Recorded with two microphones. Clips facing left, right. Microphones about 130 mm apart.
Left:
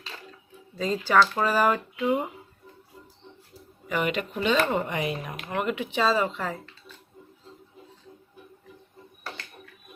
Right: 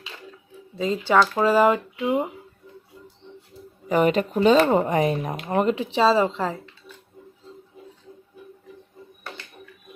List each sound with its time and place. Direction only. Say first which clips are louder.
0.8 s speech: right 2 dB; 20° right (ahead or behind)
3.8 s speech: right 8 dB; 40° right (ahead or behind)